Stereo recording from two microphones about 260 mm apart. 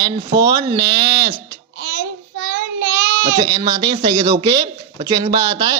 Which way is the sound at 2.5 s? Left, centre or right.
Right.